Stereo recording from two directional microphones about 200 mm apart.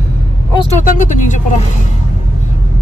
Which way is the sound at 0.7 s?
40° left (ahead or behind).